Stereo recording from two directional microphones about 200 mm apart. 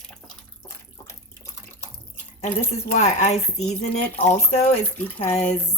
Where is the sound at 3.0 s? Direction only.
35° left (ahead or behind).